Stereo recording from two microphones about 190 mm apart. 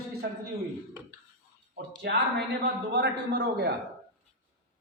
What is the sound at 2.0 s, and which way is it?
A man's voice, 60° right (ahead or behind).